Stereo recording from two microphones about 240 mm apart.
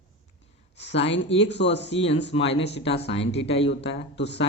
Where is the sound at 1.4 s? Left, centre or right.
Left.